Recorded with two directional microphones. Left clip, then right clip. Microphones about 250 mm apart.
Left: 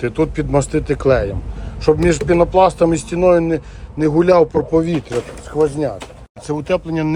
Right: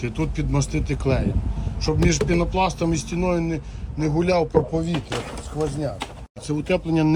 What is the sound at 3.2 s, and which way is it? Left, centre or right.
Speech, left.